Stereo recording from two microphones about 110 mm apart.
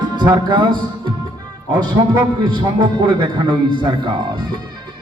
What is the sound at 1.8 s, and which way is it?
A man's voice, 40° right (ahead or behind).